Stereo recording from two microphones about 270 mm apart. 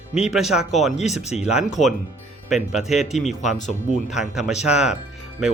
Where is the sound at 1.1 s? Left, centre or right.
Left.